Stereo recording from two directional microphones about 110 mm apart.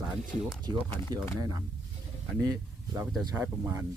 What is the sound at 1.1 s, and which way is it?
Speech, 40° right (ahead or behind).